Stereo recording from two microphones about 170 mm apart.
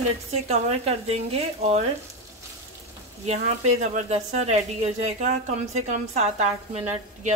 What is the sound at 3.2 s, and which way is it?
A woman's voice, 45° right (ahead or behind).